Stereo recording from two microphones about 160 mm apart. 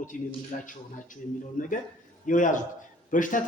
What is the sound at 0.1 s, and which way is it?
A man's voice, 60° left (ahead or behind).